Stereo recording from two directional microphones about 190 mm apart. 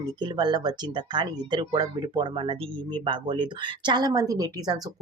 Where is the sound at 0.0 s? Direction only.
20° right (ahead or behind).